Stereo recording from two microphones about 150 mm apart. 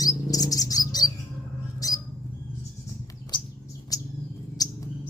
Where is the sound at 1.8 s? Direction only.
25° left (ahead or behind).